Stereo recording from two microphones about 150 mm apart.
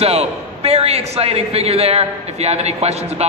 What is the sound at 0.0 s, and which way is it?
A man's voice, 45° right (ahead or behind).